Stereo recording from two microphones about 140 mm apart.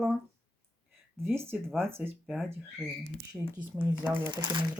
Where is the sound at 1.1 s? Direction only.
15° right (ahead or behind).